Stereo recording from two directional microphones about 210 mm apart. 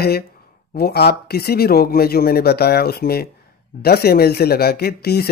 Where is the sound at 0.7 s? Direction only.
50° left (ahead or behind).